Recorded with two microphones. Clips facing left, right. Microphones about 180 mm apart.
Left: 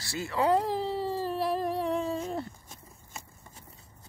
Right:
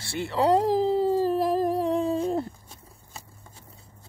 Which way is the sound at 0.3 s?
35° right (ahead or behind).